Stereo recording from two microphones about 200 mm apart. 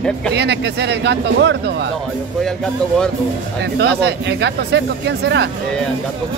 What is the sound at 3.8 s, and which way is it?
Speech, 60° right (ahead or behind).